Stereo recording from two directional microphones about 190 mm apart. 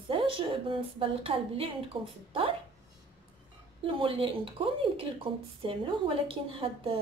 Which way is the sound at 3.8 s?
30° right (ahead or behind).